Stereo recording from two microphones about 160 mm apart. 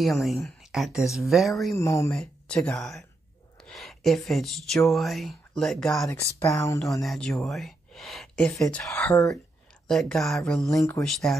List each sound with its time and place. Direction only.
0.0 s speech: centre (ahead or behind)
1.7 s speech: 20° left (ahead or behind)
2.1 s speech: 5° left (ahead or behind)
6.4 s speech: 20° left (ahead or behind)
7.0 s speech: centre (ahead or behind); by 9.3 s 15° left (ahead or behind)
9.8 s speech: centre (ahead or behind)
10.7 s speech: 20° left (ahead or behind)
11.0 s speech: centre (ahead or behind)